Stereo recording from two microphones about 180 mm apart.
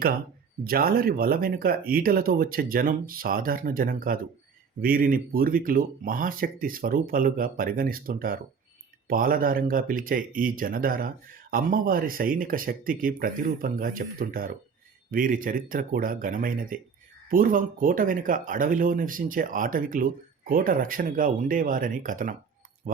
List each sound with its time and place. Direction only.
0.6 s speech: 55° right (ahead or behind)